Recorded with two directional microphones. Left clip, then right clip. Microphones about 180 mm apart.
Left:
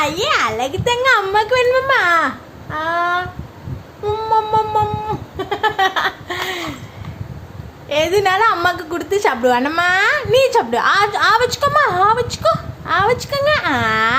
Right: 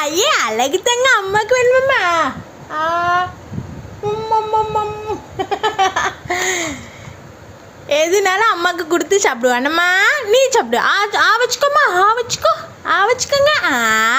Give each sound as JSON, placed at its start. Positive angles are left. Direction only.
{"t": 0.0, "sound": "a sound", "side_deg": -35}
{"t": 1.2, "sound": "a woman's voice", "side_deg": -25}
{"t": 1.7, "sound": "speech", "side_deg": -10}
{"t": 4.3, "sound": "a sound", "side_deg": -5}
{"t": 5.5, "sound": "speech", "side_deg": -5}
{"t": 6.2, "sound": "laughter", "side_deg": -25}
{"t": 7.9, "sound": "a woman's voice", "side_deg": -25}